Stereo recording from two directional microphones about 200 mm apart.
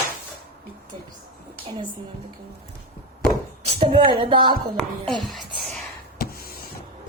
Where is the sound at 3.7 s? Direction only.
25° right (ahead or behind).